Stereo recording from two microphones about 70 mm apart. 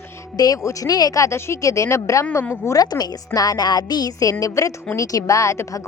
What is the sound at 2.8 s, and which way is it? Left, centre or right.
A woman's voice, left.